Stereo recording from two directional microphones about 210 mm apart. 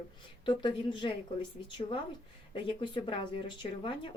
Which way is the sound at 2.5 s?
25° left (ahead or behind).